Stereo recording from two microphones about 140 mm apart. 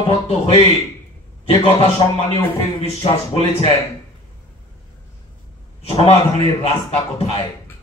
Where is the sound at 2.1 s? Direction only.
45° left (ahead or behind).